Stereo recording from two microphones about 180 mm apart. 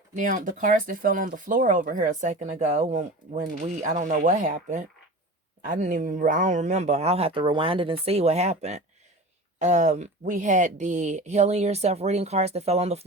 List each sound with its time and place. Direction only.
0.2 s speech: 45° right (ahead or behind)